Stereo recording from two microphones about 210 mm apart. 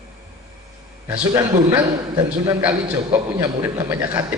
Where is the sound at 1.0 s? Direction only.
15° right (ahead or behind).